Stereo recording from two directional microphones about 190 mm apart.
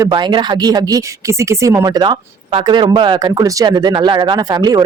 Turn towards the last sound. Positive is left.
turn(degrees=-20)  # may be behind; listen again after turning